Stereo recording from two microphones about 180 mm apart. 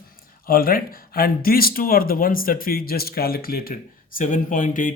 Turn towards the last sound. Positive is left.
turn(degrees=50)  # may be behind; listen again after turning